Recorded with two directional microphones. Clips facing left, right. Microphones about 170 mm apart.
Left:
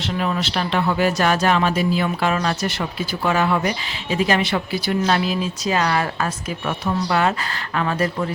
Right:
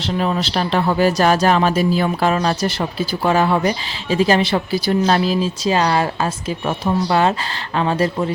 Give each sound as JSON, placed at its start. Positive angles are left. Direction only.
{"t": 0.0, "sound": "speech", "side_deg": -35}